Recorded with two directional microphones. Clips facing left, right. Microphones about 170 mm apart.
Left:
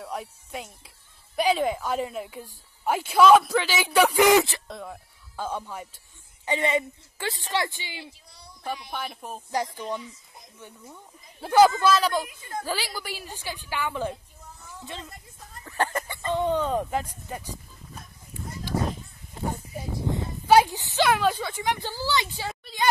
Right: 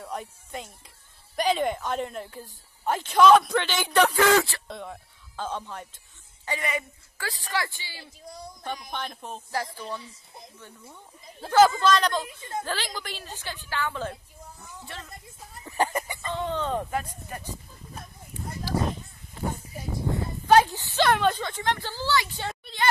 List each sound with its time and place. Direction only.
0.0 s a woman's voice: centre (ahead or behind)
4.6 s speech: centre (ahead or behind)
6.4 s a woman's voice: 25° left (ahead or behind)
8.3 s a sound: 45° right (ahead or behind)
8.9 s a woman's voice: 5° left (ahead or behind)
11.4 s a woman's voice: 15° left (ahead or behind)
12.3 s a woman's voice: 25° right (ahead or behind)
12.6 s a woman's voice: 10° left (ahead or behind)
15.6 s chicken: 15° right (ahead or behind)
16.2 s a woman's voice: 15° left (ahead or behind)
20.4 s a sound: 10° left (ahead or behind)
21.1 s a woman's voice: 5° left (ahead or behind)
22.3 s a sound: 5° left (ahead or behind)